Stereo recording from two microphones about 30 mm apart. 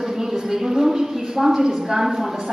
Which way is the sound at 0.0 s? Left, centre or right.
Centre.